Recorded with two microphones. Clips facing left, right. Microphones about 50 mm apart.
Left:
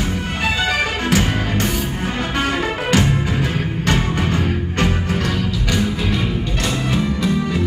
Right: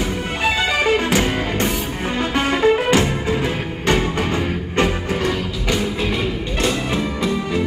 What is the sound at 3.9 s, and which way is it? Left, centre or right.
Music, centre.